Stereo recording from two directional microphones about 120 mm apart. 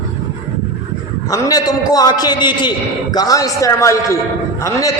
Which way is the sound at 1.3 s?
30° left (ahead or behind).